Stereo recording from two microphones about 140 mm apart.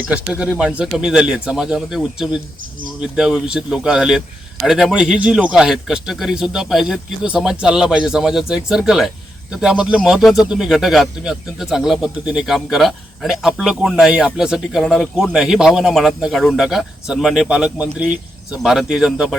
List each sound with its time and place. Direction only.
0.1 s speech: 5° right (ahead or behind)